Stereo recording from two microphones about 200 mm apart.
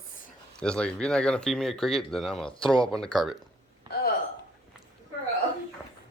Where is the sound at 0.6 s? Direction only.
5° left (ahead or behind).